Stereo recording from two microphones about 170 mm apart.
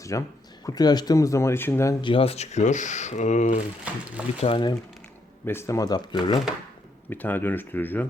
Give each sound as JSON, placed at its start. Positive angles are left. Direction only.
{"t": 0.0, "sound": "speech", "side_deg": 20}
{"t": 2.0, "sound": "speech", "side_deg": 30}
{"t": 3.8, "sound": "speech", "side_deg": -10}
{"t": 4.4, "sound": "speech", "side_deg": 30}
{"t": 5.5, "sound": "speech", "side_deg": 15}
{"t": 7.1, "sound": "speech", "side_deg": 10}